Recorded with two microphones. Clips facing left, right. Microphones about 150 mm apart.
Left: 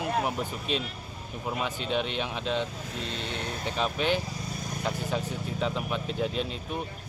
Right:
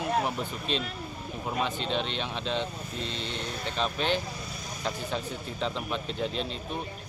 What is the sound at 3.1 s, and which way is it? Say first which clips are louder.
Speech: left 1 dB; 55° left (ahead or behind).